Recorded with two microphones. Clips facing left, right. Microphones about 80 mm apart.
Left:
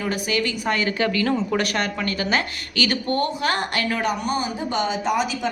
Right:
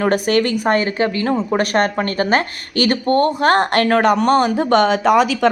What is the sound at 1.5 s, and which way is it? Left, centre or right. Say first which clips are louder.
A woman's voice: right 7 dB; right.